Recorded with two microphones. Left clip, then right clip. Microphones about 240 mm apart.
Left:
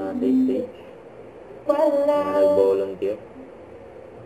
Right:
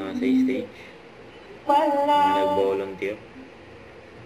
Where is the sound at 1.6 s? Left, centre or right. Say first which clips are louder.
Left 1 dB; centre.